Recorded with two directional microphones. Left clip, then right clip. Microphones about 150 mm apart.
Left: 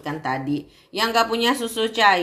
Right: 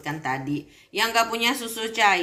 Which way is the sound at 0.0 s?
45° left (ahead or behind).